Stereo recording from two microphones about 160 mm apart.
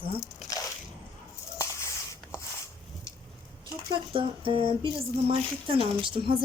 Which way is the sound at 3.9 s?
35° right (ahead or behind).